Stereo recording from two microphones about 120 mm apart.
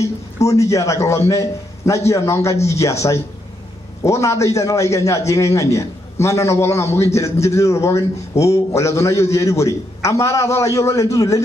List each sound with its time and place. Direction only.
0.0 s a man's voice: 25° left (ahead or behind)